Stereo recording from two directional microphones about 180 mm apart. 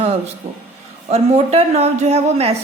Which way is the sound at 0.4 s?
35° right (ahead or behind).